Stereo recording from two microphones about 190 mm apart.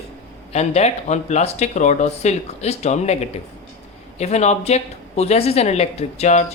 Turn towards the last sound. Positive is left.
turn(degrees=35)  # may be behind; listen again after turning